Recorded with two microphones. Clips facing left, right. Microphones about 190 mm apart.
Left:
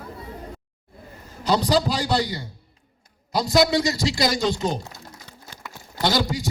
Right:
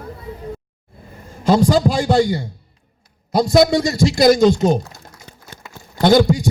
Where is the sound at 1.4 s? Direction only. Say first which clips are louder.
Right 6 dB; 50° right (ahead or behind).